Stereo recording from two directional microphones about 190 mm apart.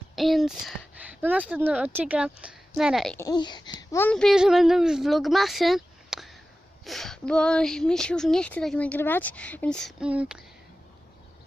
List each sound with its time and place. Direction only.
0.2 s speech: centre (ahead or behind)
3.2 s speech: 20° left (ahead or behind)
4.0 s speech: 5° left (ahead or behind)